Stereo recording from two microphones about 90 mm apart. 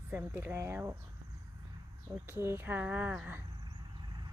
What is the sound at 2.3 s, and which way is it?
Speech, 25° right (ahead or behind).